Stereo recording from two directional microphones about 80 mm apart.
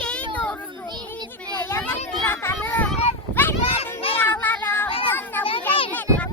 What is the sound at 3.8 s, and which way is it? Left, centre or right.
Child singing, left.